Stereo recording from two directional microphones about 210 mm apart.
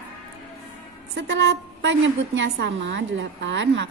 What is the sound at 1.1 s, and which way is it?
A woman's voice, 55° right (ahead or behind).